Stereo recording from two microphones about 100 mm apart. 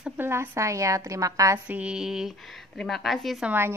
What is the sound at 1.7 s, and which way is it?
A woman's voice, 10° right (ahead or behind).